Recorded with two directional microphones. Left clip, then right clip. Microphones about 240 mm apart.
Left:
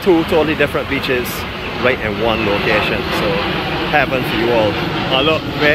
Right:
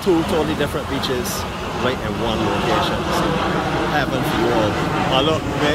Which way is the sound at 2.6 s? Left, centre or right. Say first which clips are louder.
Left 3 dB; right.